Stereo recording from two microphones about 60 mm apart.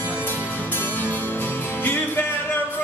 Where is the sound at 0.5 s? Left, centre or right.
Left.